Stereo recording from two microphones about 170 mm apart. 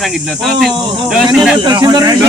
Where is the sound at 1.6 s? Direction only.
25° right (ahead or behind).